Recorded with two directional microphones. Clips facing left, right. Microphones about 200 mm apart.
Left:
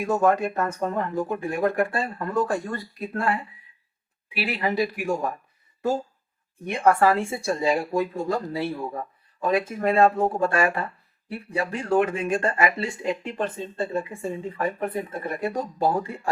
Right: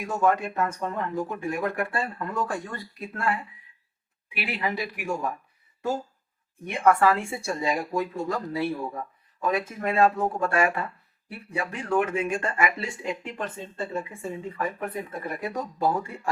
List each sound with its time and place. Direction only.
0.0 s speech: 40° left (ahead or behind)
4.4 s speech: 35° left (ahead or behind)
6.7 s speech: 35° left (ahead or behind)